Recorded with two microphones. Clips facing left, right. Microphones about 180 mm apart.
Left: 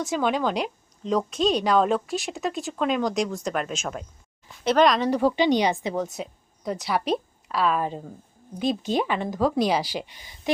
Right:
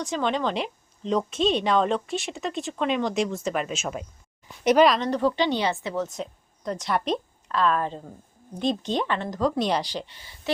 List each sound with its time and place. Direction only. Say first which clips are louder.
0.0 s speech: left 2 dB; 5° left (ahead or behind)
4.6 s a woman's voice: right 2 dB; 15° right (ahead or behind)
4.9 s a woman's voice: left 1 dB; 5° left (ahead or behind)